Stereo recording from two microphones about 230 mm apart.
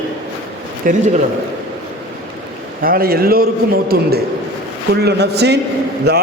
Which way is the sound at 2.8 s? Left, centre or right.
Right.